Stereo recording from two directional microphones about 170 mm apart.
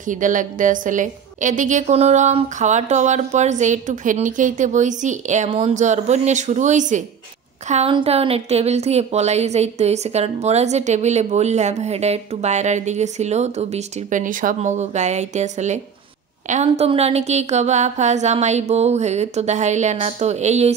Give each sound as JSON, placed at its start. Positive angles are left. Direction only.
{"t": 0.0, "sound": "a woman's voice", "side_deg": -50}